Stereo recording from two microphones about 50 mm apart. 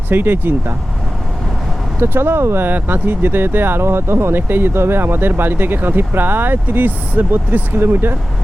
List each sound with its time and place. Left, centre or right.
0.1 s speech: right
2.0 s speech: right
2.6 s speech: right